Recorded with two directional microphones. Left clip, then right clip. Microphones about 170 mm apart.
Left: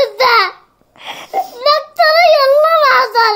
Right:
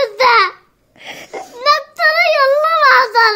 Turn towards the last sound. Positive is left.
turn(degrees=-15)  # may be behind; listen again after turning